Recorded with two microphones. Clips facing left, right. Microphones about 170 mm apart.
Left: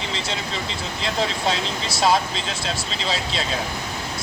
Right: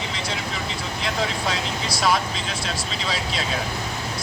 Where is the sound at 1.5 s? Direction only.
25° left (ahead or behind).